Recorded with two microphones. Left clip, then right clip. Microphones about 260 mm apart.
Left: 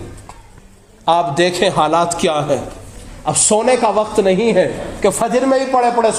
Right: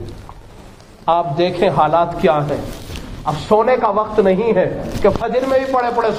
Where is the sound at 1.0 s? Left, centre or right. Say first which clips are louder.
Left 2 dB; left.